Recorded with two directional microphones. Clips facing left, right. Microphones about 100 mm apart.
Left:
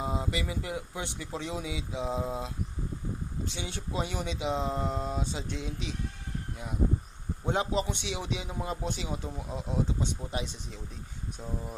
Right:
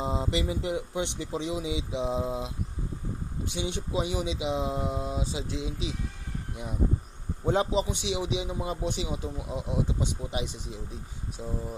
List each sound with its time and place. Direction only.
0.0 s speech: 25° right (ahead or behind)
7.4 s a man's voice: 30° right (ahead or behind)
7.7 s speech: 15° right (ahead or behind)